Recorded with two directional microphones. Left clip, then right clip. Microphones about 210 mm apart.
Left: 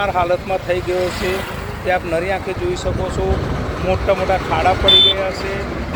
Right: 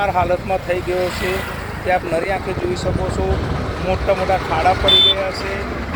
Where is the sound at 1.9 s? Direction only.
5° right (ahead or behind).